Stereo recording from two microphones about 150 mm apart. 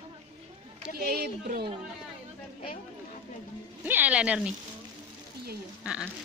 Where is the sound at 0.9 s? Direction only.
90° right.